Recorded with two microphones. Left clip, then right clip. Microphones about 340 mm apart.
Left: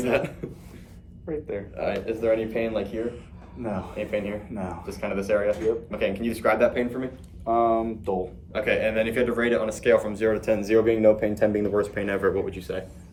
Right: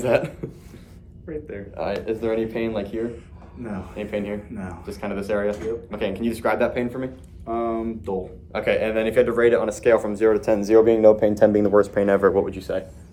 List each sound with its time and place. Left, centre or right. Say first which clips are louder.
0.0 s speech: right 4 dB; centre
1.3 s speech: left 2 dB; centre
1.7 s speech: right 3 dB; centre
4.5 s speech: left 1 dB; centre
7.4 s speech: left 4 dB; centre
8.5 s speech: right 2 dB; centre